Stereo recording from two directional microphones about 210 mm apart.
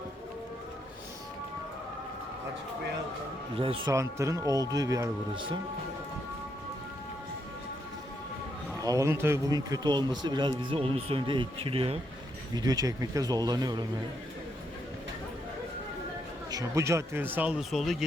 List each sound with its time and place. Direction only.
3.5 s speech: 25° right (ahead or behind)
3.9 s speech: 15° right (ahead or behind)
8.8 s speech: 15° right (ahead or behind)
16.5 s speech: 15° right (ahead or behind)